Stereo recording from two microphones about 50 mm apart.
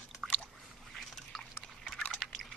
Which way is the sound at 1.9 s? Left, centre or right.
Centre.